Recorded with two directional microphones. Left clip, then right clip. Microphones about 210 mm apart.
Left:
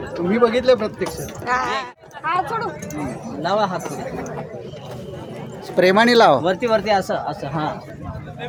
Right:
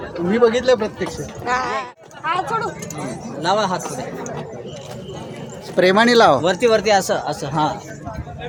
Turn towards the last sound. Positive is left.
turn(degrees=-55)  # may be behind; listen again after turning